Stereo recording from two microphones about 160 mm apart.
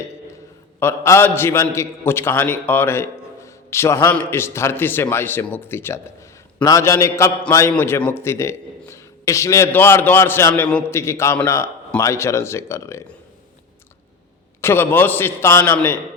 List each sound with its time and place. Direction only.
0.8 s a man's voice: 15° left (ahead or behind)
14.6 s a man's voice: 15° left (ahead or behind)